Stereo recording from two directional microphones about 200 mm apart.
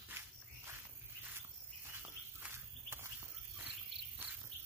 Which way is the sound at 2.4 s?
10° right (ahead or behind).